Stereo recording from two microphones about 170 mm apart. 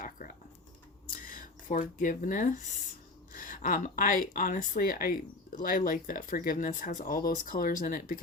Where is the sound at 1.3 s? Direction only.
50° left (ahead or behind).